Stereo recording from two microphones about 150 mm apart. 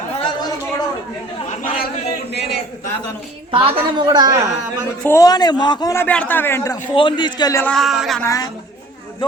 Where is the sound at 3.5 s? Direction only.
30° right (ahead or behind).